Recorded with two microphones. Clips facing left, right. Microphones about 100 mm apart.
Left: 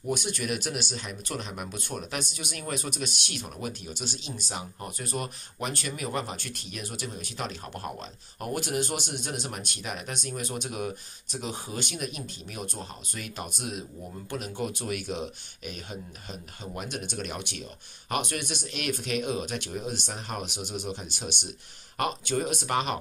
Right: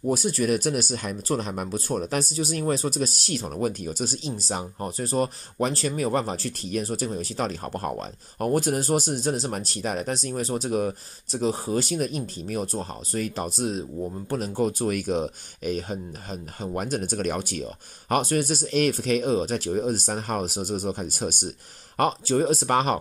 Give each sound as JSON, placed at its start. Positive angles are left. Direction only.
{"t": 0.0, "sound": "speech", "side_deg": -35}